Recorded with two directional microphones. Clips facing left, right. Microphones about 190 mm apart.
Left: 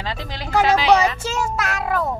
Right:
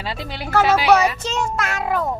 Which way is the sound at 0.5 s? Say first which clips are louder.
Even; 15° left (ahead or behind).